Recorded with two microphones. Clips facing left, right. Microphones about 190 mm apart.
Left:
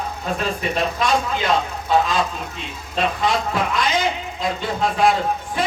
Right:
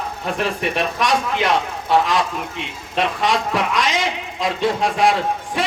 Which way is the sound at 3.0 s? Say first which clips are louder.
Right 1 dB; 80° right.